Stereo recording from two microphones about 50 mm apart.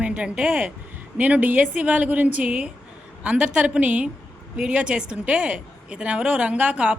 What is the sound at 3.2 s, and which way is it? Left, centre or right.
A woman's voice, centre.